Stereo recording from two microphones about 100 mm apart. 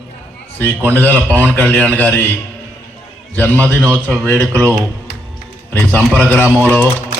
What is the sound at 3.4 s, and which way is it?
A man's voice, 15° left (ahead or behind).